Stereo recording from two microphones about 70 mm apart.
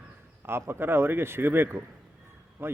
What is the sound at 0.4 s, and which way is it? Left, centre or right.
Speech, right.